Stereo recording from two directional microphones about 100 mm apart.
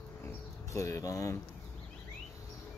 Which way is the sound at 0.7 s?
30° left (ahead or behind).